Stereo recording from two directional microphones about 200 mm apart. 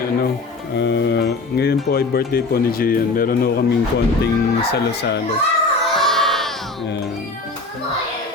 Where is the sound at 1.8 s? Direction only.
50° left (ahead or behind).